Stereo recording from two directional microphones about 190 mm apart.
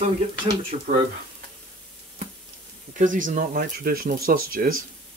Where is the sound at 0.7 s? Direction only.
40° right (ahead or behind).